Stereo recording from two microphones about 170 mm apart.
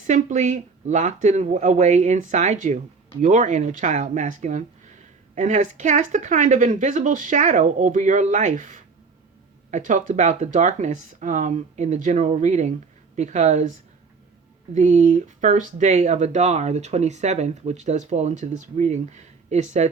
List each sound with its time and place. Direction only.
0.0 s speech: 45° right (ahead or behind)